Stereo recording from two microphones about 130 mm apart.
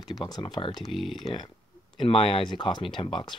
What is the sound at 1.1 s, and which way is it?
Speech, 40° left (ahead or behind).